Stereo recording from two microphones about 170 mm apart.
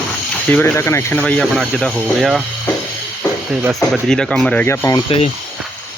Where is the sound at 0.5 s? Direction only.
10° left (ahead or behind).